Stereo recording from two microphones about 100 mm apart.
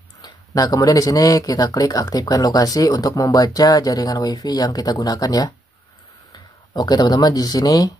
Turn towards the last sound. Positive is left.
turn(degrees=40)  # may be behind; listen again after turning